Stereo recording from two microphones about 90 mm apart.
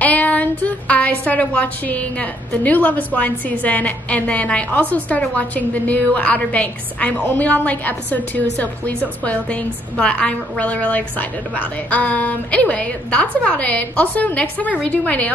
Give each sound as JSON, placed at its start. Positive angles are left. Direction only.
{"t": 0.0, "sound": "a woman's voice", "side_deg": 15}